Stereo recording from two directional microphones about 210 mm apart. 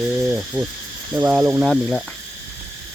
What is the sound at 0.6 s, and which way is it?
Speech, 10° right (ahead or behind).